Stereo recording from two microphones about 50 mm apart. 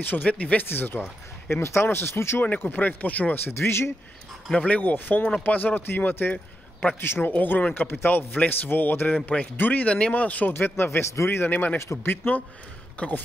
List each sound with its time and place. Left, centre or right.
0.0 s speech: left
0.7 s a man's voice: left
1.5 s speech: left
2.6 s speech: left
3.4 s speech: left
4.6 s speech: left
7.0 s a man's voice: left
9.8 s speech: left
10.1 s speech: left
10.5 s a man's voice: left
11.4 s speech: left
11.9 s a man's voice: left
13.0 s speech: left